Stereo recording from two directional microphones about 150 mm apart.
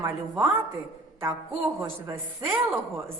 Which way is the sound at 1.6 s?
15° right (ahead or behind).